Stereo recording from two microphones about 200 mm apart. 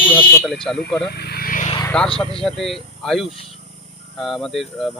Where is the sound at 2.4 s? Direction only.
Centre (ahead or behind).